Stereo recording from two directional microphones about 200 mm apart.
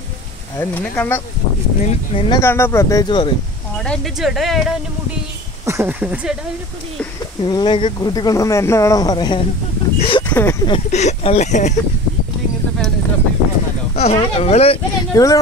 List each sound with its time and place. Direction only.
0.6 s speech: 10° left (ahead or behind)
1.9 s speech: 25° left (ahead or behind)
2.4 s speech: 15° left (ahead or behind)
3.7 s speech: 5° left (ahead or behind)
7.4 s speech: 20° left (ahead or behind)
10.3 s speech: 15° left (ahead or behind)
10.7 s speech: 35° left (ahead or behind)
13.9 s speech: 30° left (ahead or behind)
15.1 s speech: 20° left (ahead or behind)